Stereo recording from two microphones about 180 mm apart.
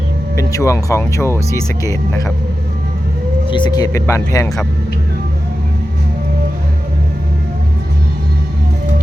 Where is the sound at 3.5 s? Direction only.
25° left (ahead or behind).